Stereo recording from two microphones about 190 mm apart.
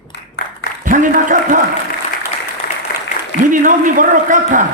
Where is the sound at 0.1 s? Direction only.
65° left (ahead or behind).